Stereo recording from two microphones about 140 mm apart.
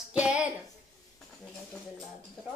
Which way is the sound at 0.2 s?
10° right (ahead or behind).